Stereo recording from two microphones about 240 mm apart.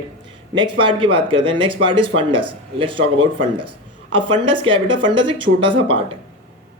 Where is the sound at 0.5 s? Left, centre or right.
Centre.